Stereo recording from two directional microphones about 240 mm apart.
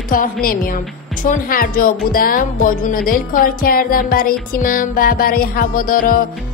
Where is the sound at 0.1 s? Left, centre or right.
Left.